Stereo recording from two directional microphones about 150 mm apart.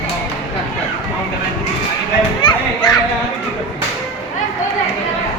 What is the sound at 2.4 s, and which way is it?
Children playing, 30° left (ahead or behind).